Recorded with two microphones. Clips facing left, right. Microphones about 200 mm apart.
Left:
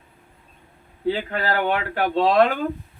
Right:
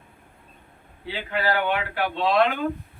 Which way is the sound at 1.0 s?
45° left (ahead or behind).